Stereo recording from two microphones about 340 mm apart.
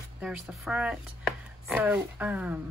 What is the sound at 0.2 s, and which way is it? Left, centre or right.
A woman's voice, centre.